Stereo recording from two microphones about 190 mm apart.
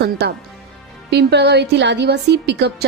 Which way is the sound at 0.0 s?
60° right (ahead or behind).